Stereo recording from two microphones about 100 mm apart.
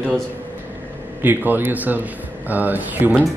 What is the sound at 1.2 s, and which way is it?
A man's voice, 20° right (ahead or behind).